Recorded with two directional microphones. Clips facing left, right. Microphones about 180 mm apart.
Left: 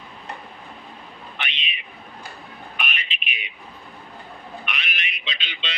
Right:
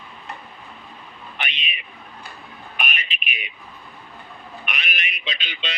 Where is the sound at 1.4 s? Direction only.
50° right (ahead or behind).